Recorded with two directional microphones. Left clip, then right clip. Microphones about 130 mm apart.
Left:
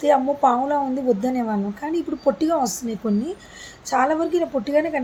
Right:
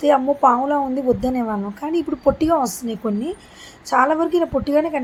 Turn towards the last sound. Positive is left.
turn(degrees=-25)  # may be behind; listen again after turning